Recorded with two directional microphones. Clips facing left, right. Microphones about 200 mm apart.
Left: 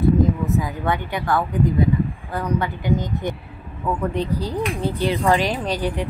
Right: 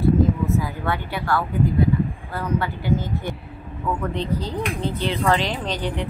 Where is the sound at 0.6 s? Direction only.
15° left (ahead or behind).